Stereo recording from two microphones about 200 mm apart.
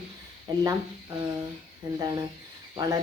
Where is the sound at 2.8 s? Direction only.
20° right (ahead or behind).